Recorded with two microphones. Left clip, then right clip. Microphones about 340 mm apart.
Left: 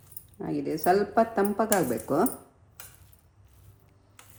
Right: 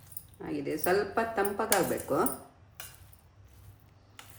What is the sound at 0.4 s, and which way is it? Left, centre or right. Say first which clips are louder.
Speech: left 5 dB; left.